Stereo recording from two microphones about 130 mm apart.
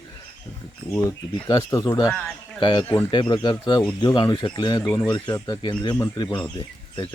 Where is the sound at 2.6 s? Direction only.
40° left (ahead or behind).